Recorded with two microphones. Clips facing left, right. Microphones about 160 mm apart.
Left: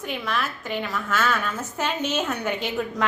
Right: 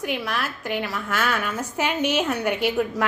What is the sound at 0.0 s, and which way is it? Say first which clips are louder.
A woman's voice: right 1 dB; 10° right (ahead or behind).